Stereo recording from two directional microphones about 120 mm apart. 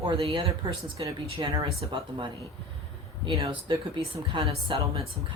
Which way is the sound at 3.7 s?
45° right (ahead or behind).